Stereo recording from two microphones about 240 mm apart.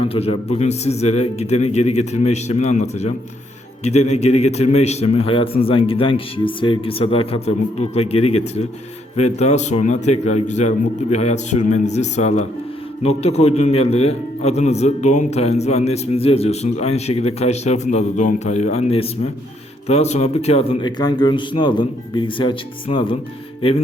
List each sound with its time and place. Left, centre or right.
0.1 s a man's voice: left
4.1 s a man's voice: left